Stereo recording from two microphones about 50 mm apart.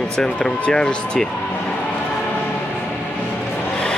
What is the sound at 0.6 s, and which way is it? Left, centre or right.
Speech, centre.